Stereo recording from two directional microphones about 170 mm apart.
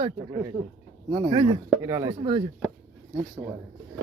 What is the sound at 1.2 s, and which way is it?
Speech, 25° right (ahead or behind).